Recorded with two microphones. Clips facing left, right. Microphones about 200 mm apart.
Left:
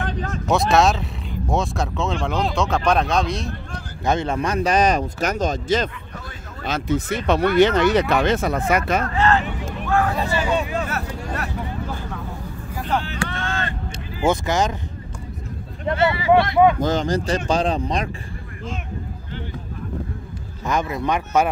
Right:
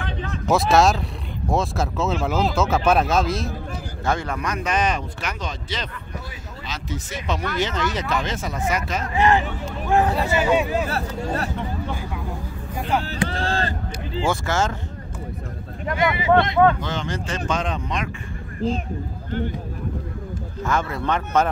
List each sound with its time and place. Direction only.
0.5 s speech: centre (ahead or behind)
4.0 s speech: 20° left (ahead or behind); by 5.9 s 45° left (ahead or behind)
6.6 s speech: 55° left (ahead or behind)
9.0 s speech: 15° right (ahead or behind)
11.2 s speech: 30° right (ahead or behind)
11.9 s vehicle: 10° right (ahead or behind)
13.3 s a sound: 35° right (ahead or behind)
14.2 s speech: 20° left (ahead or behind)
16.0 s speech: 20° right (ahead or behind)
16.8 s speech: 40° left (ahead or behind)
20.6 s speech: 15° left (ahead or behind)